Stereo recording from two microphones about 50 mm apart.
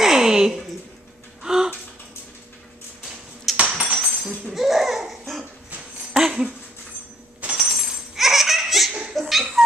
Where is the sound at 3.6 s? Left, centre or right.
Right.